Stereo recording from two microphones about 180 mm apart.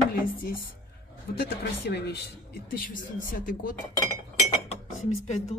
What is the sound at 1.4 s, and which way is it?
Speech, 65° left (ahead or behind).